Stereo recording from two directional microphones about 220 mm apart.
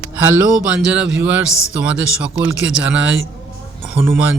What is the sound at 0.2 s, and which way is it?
Speech, 10° right (ahead or behind).